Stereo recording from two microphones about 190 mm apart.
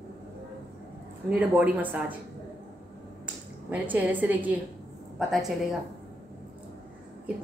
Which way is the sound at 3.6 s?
10° right (ahead or behind).